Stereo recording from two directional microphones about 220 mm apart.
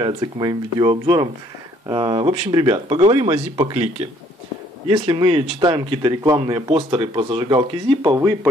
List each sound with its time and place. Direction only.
0.0 s a man's voice: 20° right (ahead or behind)